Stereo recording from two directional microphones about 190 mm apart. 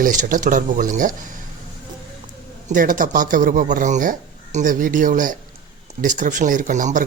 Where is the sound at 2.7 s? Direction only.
45° right (ahead or behind).